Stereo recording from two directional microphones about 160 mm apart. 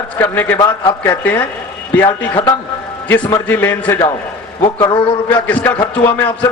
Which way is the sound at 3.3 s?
15° left (ahead or behind).